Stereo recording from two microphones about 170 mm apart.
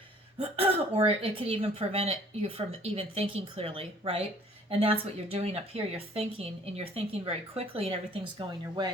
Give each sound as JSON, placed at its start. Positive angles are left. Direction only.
{"t": 0.3, "sound": "speech", "side_deg": -35}
{"t": 8.4, "sound": "speech", "side_deg": -25}